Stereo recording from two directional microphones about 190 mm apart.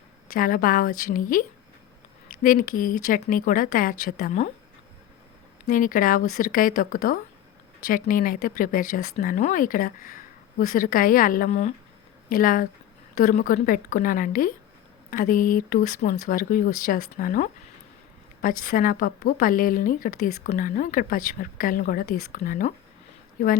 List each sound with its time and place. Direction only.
0.3 s speech: 50° left (ahead or behind)
5.6 s speech: 45° left (ahead or behind)